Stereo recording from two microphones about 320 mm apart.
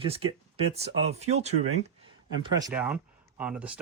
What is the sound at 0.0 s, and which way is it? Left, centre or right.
Speech, centre.